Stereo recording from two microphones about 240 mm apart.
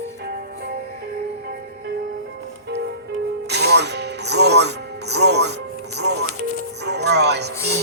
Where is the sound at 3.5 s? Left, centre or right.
Right.